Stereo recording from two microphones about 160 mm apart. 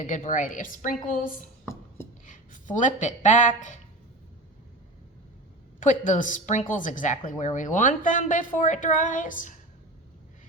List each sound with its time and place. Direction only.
0.0 s a woman's voice: 55° left (ahead or behind)
2.2 s speech: 50° left (ahead or behind)
5.8 s a woman's voice: 50° left (ahead or behind)